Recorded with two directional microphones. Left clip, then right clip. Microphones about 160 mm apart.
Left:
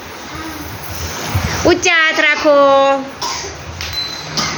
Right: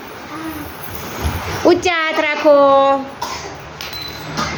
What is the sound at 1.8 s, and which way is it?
A man's voice, 10° right (ahead or behind).